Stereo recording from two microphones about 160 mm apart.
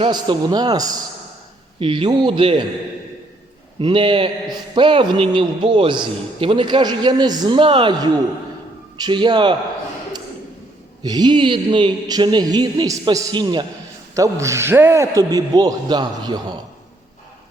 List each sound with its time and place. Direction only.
0.0 s a man's voice: 30° right (ahead or behind)
3.8 s a man's voice: 35° right (ahead or behind)
11.0 s speech: 25° right (ahead or behind)